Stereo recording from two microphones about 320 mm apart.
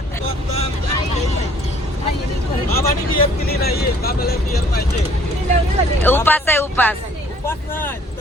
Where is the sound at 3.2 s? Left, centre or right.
Left.